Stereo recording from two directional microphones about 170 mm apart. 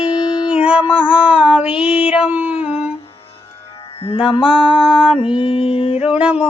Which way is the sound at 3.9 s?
35° left (ahead or behind).